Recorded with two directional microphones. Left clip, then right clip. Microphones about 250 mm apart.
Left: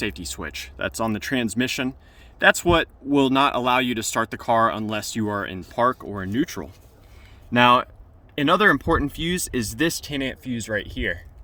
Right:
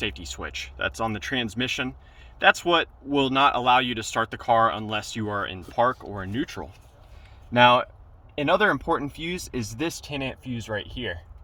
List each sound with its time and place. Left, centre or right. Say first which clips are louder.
0.3 s speech: left 1 dB; left